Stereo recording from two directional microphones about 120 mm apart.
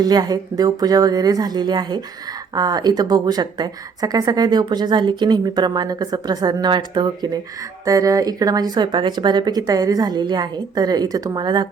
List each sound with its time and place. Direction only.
0.0 s speech: 35° right (ahead or behind)
7.9 s speech: 30° right (ahead or behind)